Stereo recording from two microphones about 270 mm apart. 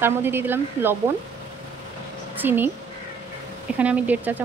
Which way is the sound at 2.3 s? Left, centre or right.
Centre.